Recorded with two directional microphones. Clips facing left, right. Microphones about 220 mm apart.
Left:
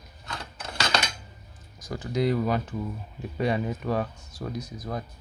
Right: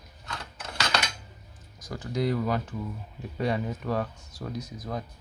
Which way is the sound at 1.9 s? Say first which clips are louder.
Left 3 dB; 25° left (ahead or behind).